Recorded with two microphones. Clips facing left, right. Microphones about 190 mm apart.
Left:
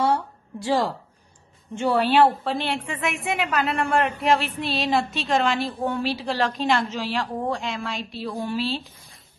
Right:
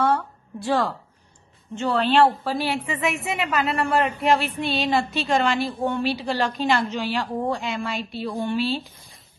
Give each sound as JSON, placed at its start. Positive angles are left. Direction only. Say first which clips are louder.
{"t": 1.8, "sound": "a woman's voice", "louder": "even", "side_deg": 10}